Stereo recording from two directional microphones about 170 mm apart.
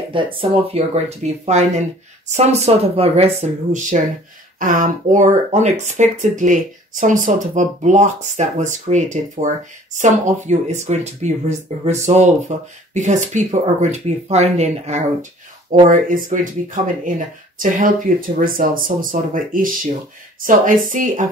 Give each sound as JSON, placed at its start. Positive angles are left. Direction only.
{"t": 0.1, "sound": "speech", "side_deg": -30}
{"t": 15.9, "sound": "speech", "side_deg": -50}